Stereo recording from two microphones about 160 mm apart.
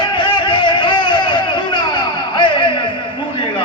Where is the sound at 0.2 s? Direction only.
30° left (ahead or behind).